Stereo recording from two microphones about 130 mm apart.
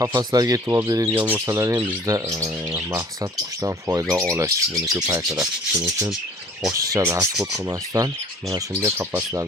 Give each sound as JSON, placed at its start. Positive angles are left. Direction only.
{"t": 0.0, "sound": "speech", "side_deg": -30}